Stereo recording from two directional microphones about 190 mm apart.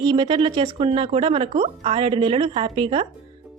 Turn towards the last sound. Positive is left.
turn(degrees=-30)  # may be behind; listen again after turning